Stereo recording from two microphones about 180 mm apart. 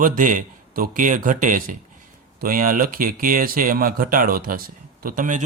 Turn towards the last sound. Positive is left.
turn(degrees=-45)  # may be behind; listen again after turning